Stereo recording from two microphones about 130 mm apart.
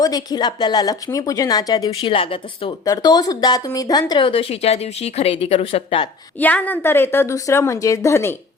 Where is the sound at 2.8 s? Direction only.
30° left (ahead or behind); by 6.0 s 45° left (ahead or behind).